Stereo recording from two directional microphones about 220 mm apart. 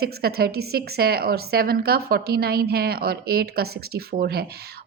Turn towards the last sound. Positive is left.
turn(degrees=-45)  # may be behind; listen again after turning